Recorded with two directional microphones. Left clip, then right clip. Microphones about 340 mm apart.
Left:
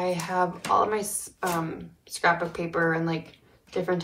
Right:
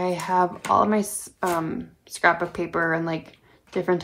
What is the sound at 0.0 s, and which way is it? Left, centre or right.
Speech, centre.